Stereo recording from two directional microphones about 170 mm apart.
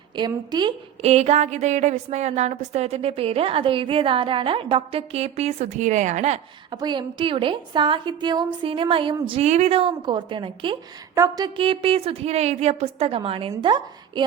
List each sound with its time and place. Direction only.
0.2 s a woman's voice: 25° right (ahead or behind)
1.0 s a woman's voice: 40° right (ahead or behind)
6.7 s a woman's voice: 25° right (ahead or behind)